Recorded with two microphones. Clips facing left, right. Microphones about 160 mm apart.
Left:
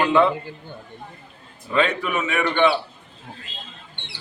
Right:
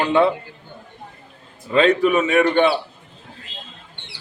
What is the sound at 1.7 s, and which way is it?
Speech, 35° right (ahead or behind).